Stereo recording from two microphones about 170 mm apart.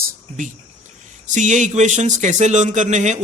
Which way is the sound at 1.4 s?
45° right (ahead or behind).